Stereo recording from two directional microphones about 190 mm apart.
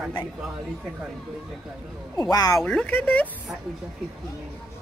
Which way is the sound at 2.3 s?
20° left (ahead or behind).